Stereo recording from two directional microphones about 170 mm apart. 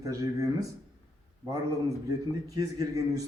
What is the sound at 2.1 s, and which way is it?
A man's voice, 20° right (ahead or behind).